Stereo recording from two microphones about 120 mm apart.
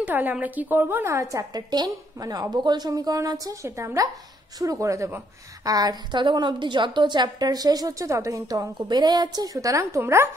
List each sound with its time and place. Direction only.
0.0 s a woman's voice: 15° right (ahead or behind)